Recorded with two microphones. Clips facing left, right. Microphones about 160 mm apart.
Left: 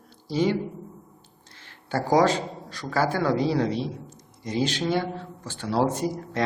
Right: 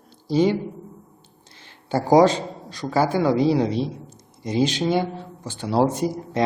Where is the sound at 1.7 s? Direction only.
20° right (ahead or behind).